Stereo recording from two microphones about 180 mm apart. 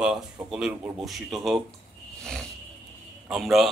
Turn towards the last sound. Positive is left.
turn(degrees=0)  # may be behind; listen again after turning